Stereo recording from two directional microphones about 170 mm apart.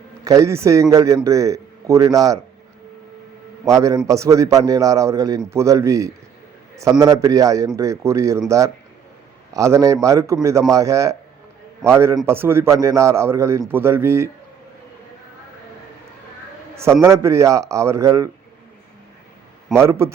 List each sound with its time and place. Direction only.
0.3 s a man's voice: 20° right (ahead or behind)
3.7 s a man's voice: 20° right (ahead or behind)
16.7 s a man's voice: 15° right (ahead or behind)
19.7 s a man's voice: 15° right (ahead or behind)